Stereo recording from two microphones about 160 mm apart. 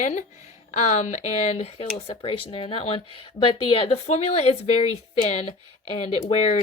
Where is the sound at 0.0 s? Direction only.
45° left (ahead or behind).